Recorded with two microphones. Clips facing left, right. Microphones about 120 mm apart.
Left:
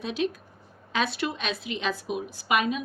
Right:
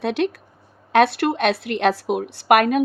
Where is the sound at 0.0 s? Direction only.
70° right (ahead or behind).